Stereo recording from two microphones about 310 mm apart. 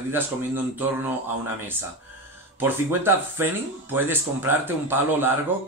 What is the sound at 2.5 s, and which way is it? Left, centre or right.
Speech, centre.